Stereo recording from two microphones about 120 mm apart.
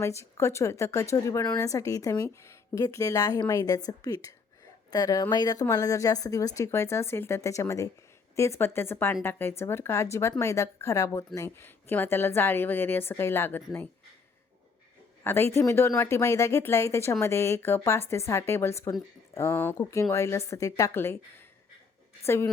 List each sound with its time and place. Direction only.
0.0 s a woman's voice: 25° left (ahead or behind)
15.2 s speech: 20° left (ahead or behind)